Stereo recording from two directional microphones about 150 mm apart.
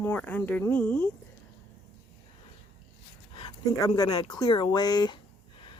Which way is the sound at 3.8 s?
25° left (ahead or behind).